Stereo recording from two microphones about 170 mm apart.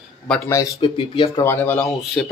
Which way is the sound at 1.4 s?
10° left (ahead or behind).